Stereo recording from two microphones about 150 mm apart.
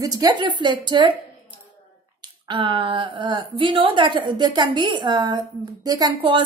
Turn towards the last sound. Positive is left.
turn(degrees=-30)  # may be behind; listen again after turning